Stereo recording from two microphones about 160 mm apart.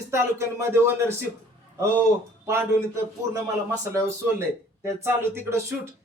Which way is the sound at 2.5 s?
20° right (ahead or behind).